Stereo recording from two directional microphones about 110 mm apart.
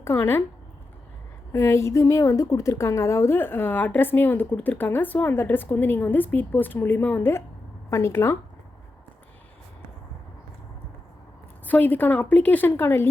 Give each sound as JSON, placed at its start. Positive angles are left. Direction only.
{"t": 0.0, "sound": "a woman's voice", "side_deg": 25}
{"t": 1.5, "sound": "a woman's voice", "side_deg": 25}
{"t": 11.6, "sound": "a woman's voice", "side_deg": 15}